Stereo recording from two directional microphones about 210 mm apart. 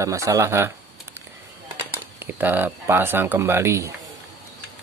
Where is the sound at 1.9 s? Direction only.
10° right (ahead or behind).